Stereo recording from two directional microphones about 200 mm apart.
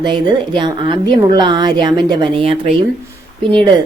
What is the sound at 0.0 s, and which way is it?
Speech, 20° right (ahead or behind).